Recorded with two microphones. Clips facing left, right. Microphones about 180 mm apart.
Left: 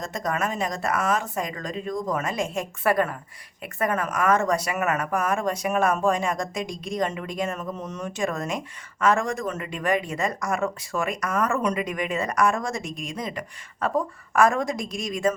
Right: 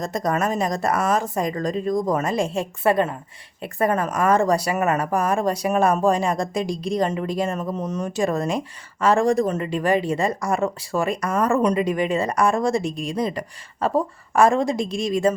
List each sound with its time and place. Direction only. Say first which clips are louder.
0.0 s speech: right 5 dB; 35° right (ahead or behind)